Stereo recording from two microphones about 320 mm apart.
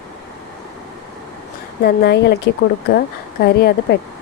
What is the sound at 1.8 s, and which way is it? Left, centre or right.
A woman's voice, left.